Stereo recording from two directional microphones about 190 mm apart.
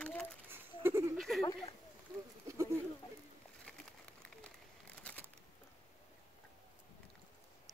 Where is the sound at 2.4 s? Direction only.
15° right (ahead or behind).